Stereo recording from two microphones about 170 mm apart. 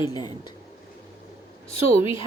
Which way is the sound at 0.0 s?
25° left (ahead or behind).